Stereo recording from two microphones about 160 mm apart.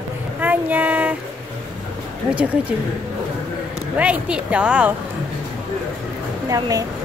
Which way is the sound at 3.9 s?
5° right (ahead or behind).